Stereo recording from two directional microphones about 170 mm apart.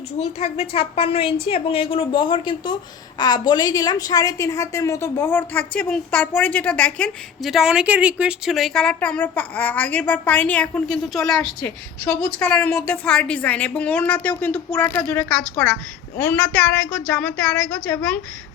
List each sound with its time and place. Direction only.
0.2 s a woman's voice: 35° left (ahead or behind); by 18.2 s 5° left (ahead or behind)